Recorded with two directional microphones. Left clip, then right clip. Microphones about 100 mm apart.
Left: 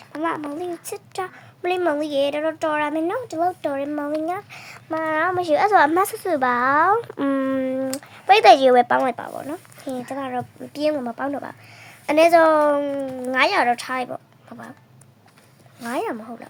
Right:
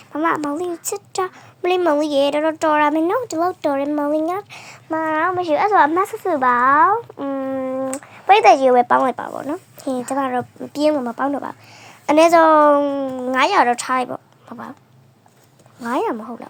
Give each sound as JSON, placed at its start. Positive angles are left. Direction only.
{"t": 0.1, "sound": "a sound", "side_deg": -55}
{"t": 0.5, "sound": "speech", "side_deg": -50}
{"t": 0.9, "sound": "speech", "side_deg": -35}
{"t": 3.8, "sound": "speech", "side_deg": -35}
{"t": 5.3, "sound": "speech", "side_deg": 30}
{"t": 7.0, "sound": "speech", "side_deg": 90}
{"t": 7.9, "sound": "speech", "side_deg": 15}
{"t": 9.0, "sound": "speech", "side_deg": -20}
{"t": 9.7, "sound": "speech", "side_deg": -60}
{"t": 10.9, "sound": "a woman's voice", "side_deg": -25}
{"t": 13.3, "sound": "speech", "side_deg": -30}
{"t": 15.9, "sound": "speech", "side_deg": -30}